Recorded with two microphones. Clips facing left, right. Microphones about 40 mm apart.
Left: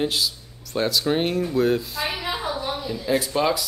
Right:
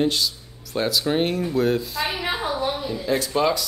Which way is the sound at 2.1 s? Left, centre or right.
Centre.